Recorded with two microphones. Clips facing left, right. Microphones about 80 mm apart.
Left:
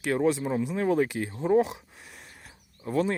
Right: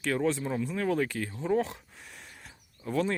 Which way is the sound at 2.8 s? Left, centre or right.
Centre.